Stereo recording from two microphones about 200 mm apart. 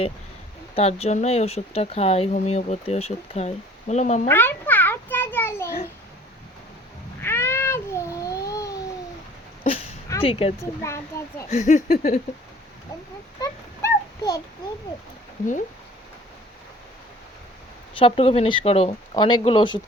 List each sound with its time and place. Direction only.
0.8 s speech: 30° left (ahead or behind)
4.3 s a sound: 10° left (ahead or behind)
5.6 s a sound: 50° left (ahead or behind)
7.2 s cat: 10° left (ahead or behind)
10.2 s speech: 30° left (ahead or behind)
10.6 s a child's voice: 15° left (ahead or behind)
11.5 s speech: 40° left (ahead or behind)
13.4 s a sound: 20° left (ahead or behind)
15.4 s speech: 40° left (ahead or behind)
18.0 s speech: 30° left (ahead or behind)